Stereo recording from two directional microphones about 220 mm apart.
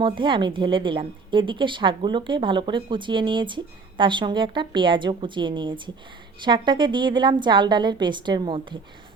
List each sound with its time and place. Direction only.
0.0 s a woman's voice: 20° right (ahead or behind)